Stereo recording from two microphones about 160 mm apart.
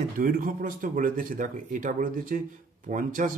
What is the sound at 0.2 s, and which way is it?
A man's voice, 60° right (ahead or behind).